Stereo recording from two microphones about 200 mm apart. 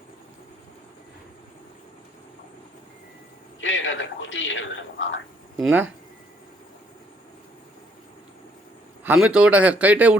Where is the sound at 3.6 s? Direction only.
70° left (ahead or behind).